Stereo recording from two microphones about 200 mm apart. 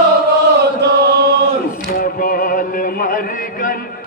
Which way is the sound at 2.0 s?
45° left (ahead or behind).